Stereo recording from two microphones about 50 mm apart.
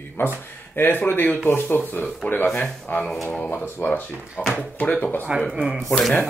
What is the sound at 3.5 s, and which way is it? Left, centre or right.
Speech, left.